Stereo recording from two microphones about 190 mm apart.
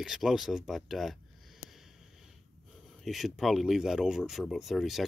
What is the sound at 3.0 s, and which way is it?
Speech, centre (ahead or behind).